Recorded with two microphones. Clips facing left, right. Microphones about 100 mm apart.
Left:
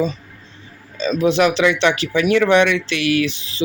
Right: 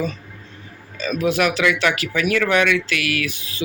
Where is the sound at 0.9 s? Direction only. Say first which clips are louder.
Left 4 dB; 25° left (ahead or behind).